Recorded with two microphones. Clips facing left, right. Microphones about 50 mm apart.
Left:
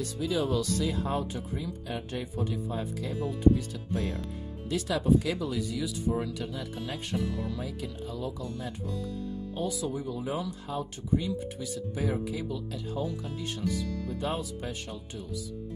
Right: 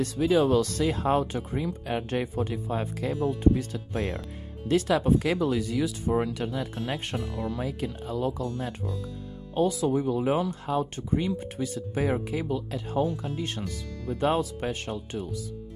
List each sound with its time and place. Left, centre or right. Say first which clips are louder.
0.0 s speech: right 7 dB; right
9.6 s speech: right 9 dB; right